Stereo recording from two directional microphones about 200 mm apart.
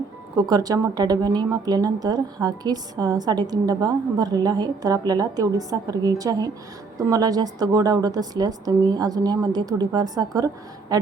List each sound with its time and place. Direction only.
0.3 s a woman's voice: 20° right (ahead or behind)